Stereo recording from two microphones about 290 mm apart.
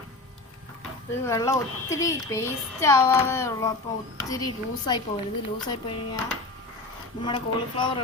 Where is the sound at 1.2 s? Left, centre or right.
Centre.